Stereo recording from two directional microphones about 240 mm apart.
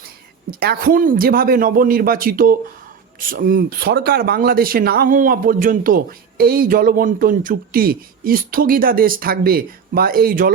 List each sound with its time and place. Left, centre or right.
0.6 s speech: right